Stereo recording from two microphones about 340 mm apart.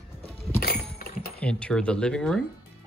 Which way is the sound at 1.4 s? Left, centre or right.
Centre.